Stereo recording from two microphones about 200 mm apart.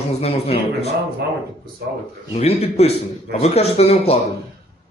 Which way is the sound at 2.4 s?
30° left (ahead or behind).